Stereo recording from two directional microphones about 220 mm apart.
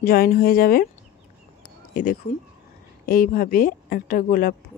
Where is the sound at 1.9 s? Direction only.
40° left (ahead or behind).